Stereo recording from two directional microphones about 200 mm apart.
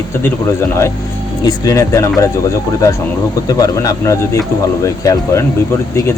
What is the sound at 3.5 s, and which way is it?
Speech, 20° left (ahead or behind).